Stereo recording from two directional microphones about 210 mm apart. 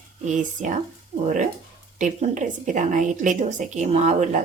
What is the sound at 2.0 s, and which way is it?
Speech, 35° right (ahead or behind).